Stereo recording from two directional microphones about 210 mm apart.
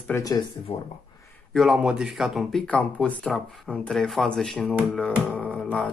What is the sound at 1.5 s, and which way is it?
Speech, centre (ahead or behind).